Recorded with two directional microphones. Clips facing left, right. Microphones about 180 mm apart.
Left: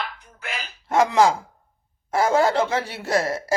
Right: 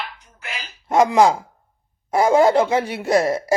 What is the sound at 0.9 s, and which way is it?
Speech, 15° right (ahead or behind).